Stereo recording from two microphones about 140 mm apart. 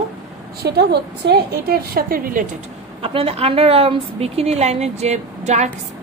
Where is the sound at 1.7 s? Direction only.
90° right.